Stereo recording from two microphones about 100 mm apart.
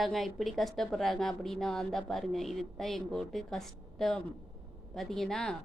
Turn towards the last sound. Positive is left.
turn(degrees=5)  # may be behind; listen again after turning